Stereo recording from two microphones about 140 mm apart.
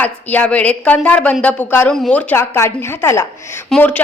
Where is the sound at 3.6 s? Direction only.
5° left (ahead or behind).